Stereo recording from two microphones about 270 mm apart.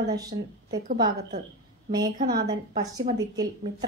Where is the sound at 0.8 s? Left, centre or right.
Right.